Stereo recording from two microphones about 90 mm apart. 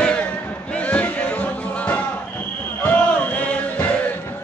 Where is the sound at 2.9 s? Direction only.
15° left (ahead or behind).